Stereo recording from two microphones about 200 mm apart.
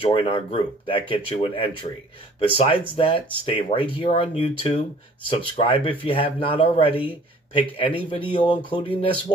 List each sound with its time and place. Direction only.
0.0 s speech: 25° left (ahead or behind)